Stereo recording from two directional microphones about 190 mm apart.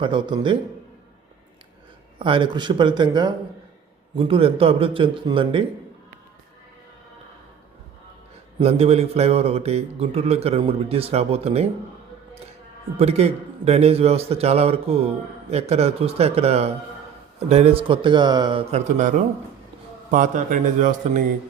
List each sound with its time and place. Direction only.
0.0 s a man's voice: 25° right (ahead or behind)
2.1 s a man's voice: 25° right (ahead or behind)
8.5 s a man's voice: 35° right (ahead or behind)
13.0 s a man's voice: 35° right (ahead or behind)
18.7 s a man's voice: 40° right (ahead or behind)